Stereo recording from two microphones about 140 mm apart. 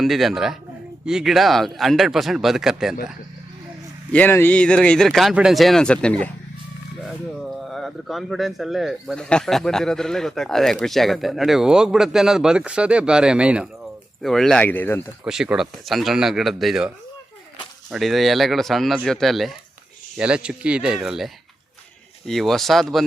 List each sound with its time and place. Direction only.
0.0 s speech: centre (ahead or behind)
4.1 s speech: 15° left (ahead or behind); by 13.7 s 10° right (ahead or behind)
14.2 s speech: centre (ahead or behind)
15.2 s speech: 5° right (ahead or behind)
17.9 s speech: centre (ahead or behind)
22.3 s speech: centre (ahead or behind)